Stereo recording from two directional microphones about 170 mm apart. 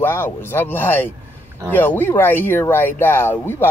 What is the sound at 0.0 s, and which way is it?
Speech, 15° left (ahead or behind).